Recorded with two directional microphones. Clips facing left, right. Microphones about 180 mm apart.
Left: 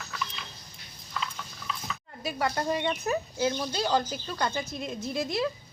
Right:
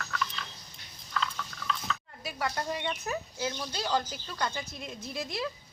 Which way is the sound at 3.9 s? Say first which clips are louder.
Left 2 dB; 45° left (ahead or behind).